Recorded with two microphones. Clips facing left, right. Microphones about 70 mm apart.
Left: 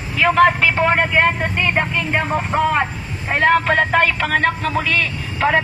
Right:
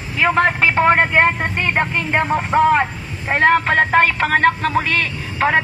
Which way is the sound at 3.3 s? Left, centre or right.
Right.